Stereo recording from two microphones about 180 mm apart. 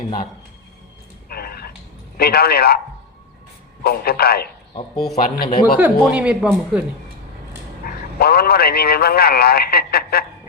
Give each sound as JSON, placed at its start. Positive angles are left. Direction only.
{"t": 1.3, "sound": "a sound", "side_deg": 60}
{"t": 2.1, "sound": "a man's voice", "side_deg": 60}
{"t": 3.8, "sound": "a man's voice", "side_deg": 60}
{"t": 4.7, "sound": "speech", "side_deg": 30}
{"t": 5.1, "sound": "speech", "side_deg": 45}
{"t": 5.8, "sound": "speech", "side_deg": -5}
{"t": 7.9, "sound": "a man's voice", "side_deg": 60}